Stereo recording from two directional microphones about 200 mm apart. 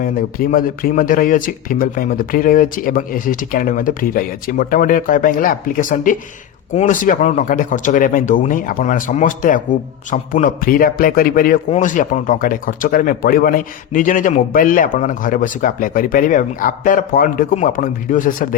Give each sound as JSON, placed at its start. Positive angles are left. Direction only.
{"t": 0.0, "sound": "speech", "side_deg": 45}